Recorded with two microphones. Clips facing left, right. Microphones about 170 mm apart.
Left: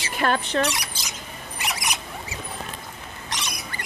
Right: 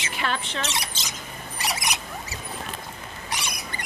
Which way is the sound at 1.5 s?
35° right (ahead or behind).